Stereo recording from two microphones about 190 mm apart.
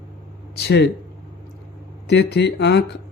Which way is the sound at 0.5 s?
60° left (ahead or behind).